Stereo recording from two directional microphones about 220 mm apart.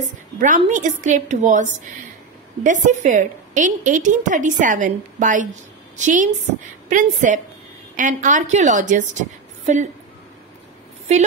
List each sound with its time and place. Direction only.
0.4 s a woman's voice: 35° right (ahead or behind)